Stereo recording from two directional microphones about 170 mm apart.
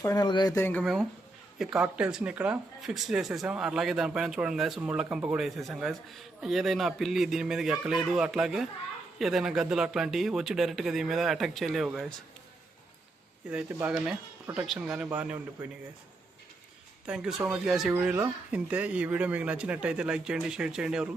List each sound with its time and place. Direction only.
0.0 s speech: 20° left (ahead or behind)
1.5 s speech: 5° right (ahead or behind)
13.5 s speech: 10° right (ahead or behind)
17.1 s speech: 5° right (ahead or behind)